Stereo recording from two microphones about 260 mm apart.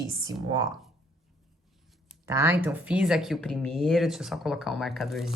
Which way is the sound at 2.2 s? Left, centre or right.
Centre.